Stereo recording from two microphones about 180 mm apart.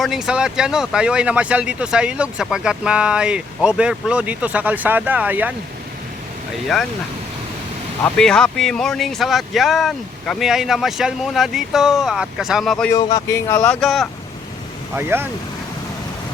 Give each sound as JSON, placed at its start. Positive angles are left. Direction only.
{"t": 0.0, "sound": "speech", "side_deg": 0}
{"t": 8.0, "sound": "speech", "side_deg": 5}
{"t": 12.9, "sound": "speech", "side_deg": 20}
{"t": 14.9, "sound": "speech", "side_deg": -10}